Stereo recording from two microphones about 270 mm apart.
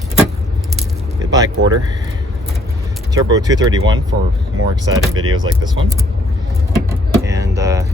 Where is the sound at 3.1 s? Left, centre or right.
Centre.